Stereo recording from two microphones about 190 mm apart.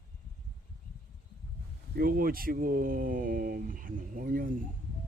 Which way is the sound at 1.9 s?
50° right (ahead or behind).